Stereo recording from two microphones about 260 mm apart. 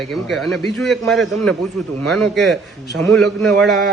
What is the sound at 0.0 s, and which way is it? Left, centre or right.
A man's voice, centre.